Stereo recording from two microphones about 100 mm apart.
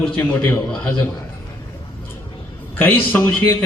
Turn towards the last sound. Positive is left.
turn(degrees=20)  # may be behind; listen again after turning